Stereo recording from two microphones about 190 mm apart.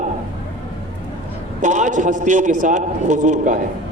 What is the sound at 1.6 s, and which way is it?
A man's voice, 40° right (ahead or behind).